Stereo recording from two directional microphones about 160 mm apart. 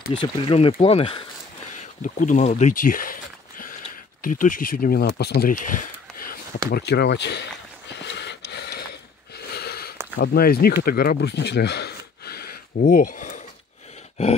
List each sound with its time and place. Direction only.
0.2 s speech: 35° left (ahead or behind)
2.0 s speech: 55° left (ahead or behind)
6.7 s speech: 90° left
7.9 s a sound: 90° left
10.2 s speech: 75° left (ahead or behind)
10.8 s a sound: 75° left (ahead or behind)
12.8 s speech: 55° left (ahead or behind)